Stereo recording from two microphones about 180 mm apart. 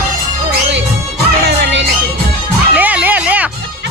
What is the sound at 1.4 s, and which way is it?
Music, 75° right (ahead or behind).